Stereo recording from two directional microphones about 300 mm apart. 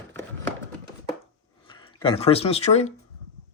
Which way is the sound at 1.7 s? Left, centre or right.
Centre.